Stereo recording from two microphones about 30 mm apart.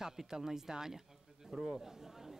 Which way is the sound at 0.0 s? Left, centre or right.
Centre.